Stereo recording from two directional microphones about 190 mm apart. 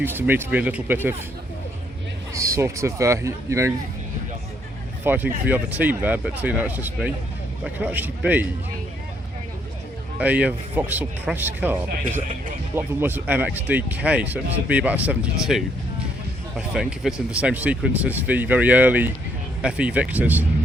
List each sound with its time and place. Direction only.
0.0 s speech: 10° right (ahead or behind)
2.3 s speech: 15° right (ahead or behind)
5.0 s speech: 10° right (ahead or behind)
10.2 s speech: 10° right (ahead or behind)